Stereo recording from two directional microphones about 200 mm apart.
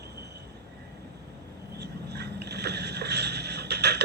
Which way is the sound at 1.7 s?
55° right (ahead or behind).